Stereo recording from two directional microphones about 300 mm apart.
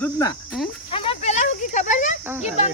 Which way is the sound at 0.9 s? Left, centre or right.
Centre.